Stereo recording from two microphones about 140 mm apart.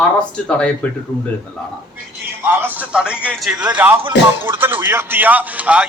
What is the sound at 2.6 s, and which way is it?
A man's voice, 10° right (ahead or behind).